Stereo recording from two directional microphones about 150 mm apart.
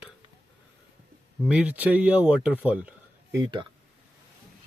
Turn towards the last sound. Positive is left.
turn(degrees=-25)  # may be behind; listen again after turning